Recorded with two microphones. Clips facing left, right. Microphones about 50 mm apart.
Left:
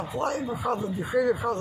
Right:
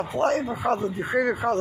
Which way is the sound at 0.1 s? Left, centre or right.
Right.